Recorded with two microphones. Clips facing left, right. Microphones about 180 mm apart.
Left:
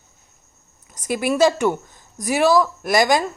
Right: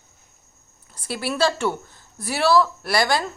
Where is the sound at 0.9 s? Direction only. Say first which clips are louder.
Left 6 dB; 15° left (ahead or behind).